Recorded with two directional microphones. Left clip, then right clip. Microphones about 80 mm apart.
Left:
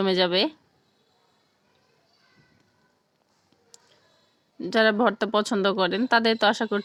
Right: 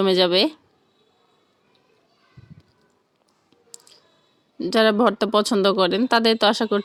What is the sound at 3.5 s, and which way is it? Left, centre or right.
Speech, right.